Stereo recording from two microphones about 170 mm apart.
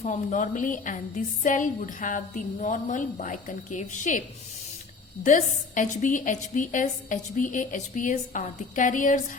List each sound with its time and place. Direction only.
0.0 s a woman's voice: 45° left (ahead or behind)
5.2 s a woman's voice: 45° left (ahead or behind)